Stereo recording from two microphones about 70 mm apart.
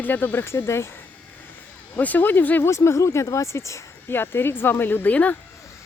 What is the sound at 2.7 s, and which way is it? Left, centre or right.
A woman's voice, left.